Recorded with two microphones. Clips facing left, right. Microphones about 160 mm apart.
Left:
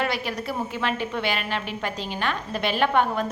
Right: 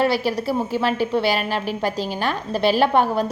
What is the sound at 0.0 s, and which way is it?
A woman's voice, 35° right (ahead or behind).